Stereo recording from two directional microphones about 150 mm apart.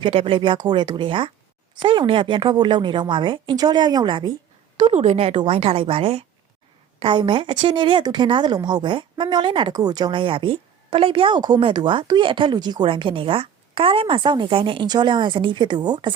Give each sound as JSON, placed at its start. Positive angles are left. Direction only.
{"t": 0.0, "sound": "a woman's voice", "side_deg": -35}
{"t": 4.8, "sound": "a woman's voice", "side_deg": -45}